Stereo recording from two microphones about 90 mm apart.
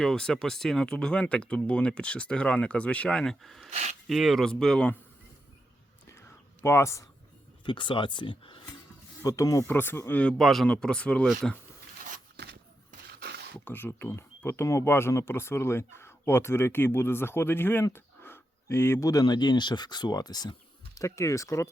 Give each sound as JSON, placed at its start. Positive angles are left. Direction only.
{"t": 0.0, "sound": "speech", "side_deg": 5}
{"t": 6.1, "sound": "a sound", "side_deg": 30}
{"t": 7.6, "sound": "speech", "side_deg": 65}
{"t": 9.2, "sound": "speech", "side_deg": 40}
{"t": 9.6, "sound": "speech", "side_deg": 25}
{"t": 10.3, "sound": "speech", "side_deg": 5}
{"t": 13.7, "sound": "speech", "side_deg": 20}
{"t": 17.9, "sound": "a sound", "side_deg": 25}
{"t": 19.2, "sound": "speech", "side_deg": 55}
{"t": 20.9, "sound": "speech", "side_deg": 35}